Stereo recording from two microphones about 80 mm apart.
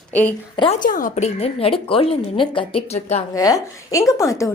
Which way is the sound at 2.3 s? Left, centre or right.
Left.